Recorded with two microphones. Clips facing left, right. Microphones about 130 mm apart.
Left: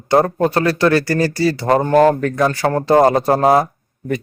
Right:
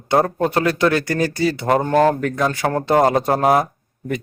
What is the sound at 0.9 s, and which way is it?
Speech, 15° right (ahead or behind).